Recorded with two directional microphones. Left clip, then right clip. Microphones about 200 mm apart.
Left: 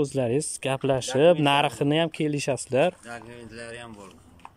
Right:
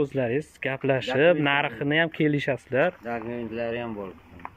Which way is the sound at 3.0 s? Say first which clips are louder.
Right 8 dB; 20° right (ahead or behind).